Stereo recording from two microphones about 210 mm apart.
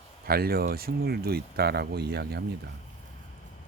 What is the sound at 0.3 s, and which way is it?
Speech, 45° right (ahead or behind).